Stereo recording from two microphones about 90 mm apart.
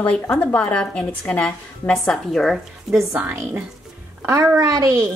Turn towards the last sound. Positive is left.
turn(degrees=-35)  # may be behind; listen again after turning